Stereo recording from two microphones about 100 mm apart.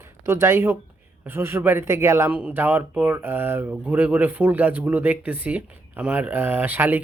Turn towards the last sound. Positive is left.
turn(degrees=-20)  # may be behind; listen again after turning